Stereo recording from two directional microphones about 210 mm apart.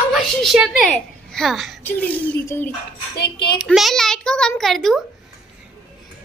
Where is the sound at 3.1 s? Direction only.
50° left (ahead or behind).